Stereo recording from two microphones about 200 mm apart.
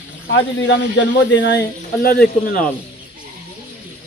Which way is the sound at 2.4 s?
45° left (ahead or behind).